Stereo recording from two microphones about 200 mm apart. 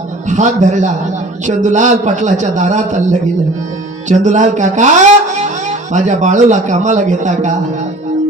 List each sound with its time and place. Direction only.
0.3 s a man's voice: 35° right (ahead or behind)